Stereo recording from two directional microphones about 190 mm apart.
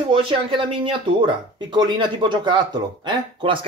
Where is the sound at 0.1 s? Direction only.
25° right (ahead or behind).